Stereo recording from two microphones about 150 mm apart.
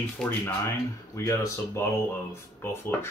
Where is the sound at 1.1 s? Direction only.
20° left (ahead or behind).